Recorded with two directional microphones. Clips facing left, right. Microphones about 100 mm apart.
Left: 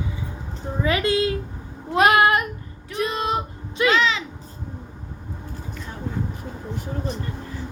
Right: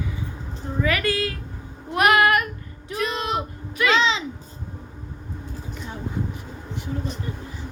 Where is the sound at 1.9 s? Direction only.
20° left (ahead or behind).